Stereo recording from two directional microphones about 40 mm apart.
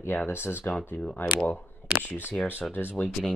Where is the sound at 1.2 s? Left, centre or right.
Left.